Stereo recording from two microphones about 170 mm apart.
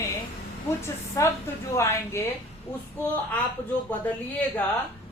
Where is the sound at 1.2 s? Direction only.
20° left (ahead or behind).